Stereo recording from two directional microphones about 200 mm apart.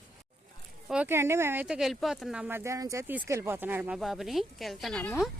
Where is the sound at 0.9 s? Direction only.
10° right (ahead or behind).